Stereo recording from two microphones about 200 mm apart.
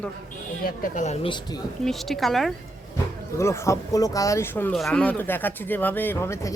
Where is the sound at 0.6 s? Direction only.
40° left (ahead or behind).